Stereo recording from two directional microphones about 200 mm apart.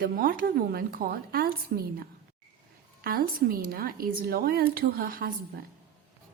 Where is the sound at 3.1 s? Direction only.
45° right (ahead or behind).